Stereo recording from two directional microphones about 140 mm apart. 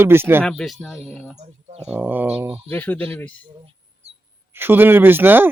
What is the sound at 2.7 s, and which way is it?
Speech, 10° left (ahead or behind).